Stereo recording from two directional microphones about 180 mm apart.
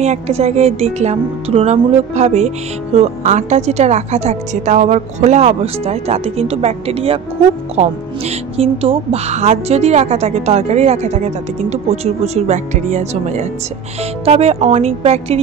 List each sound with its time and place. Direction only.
0.0 s speech: 35° right (ahead or behind)